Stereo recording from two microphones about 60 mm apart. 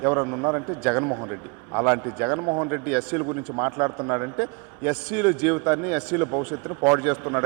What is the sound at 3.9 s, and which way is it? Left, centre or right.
Speech, right.